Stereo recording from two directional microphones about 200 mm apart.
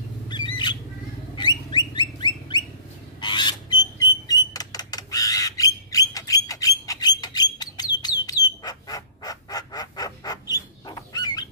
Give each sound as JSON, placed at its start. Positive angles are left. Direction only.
{"t": 1.3, "sound": "a sound", "side_deg": 20}
{"t": 2.0, "sound": "bird", "side_deg": 20}
{"t": 3.2, "sound": "rodents", "side_deg": 20}
{"t": 8.0, "sound": "bird", "side_deg": 20}
{"t": 10.5, "sound": "fowl", "side_deg": 20}